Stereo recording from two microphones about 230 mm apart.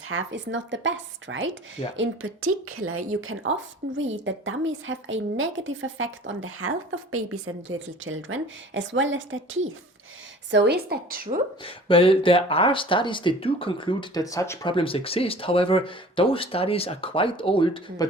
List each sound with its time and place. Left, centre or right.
0.1 s a woman's voice: right
11.6 s speech: left